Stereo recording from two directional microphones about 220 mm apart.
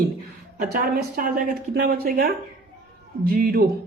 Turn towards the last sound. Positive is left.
turn(degrees=-40)  # may be behind; listen again after turning